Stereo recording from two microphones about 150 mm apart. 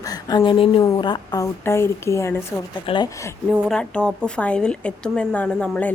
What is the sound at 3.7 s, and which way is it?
A woman's voice, 5° left (ahead or behind).